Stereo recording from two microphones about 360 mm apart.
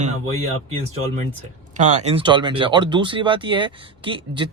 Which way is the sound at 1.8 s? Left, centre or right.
Centre.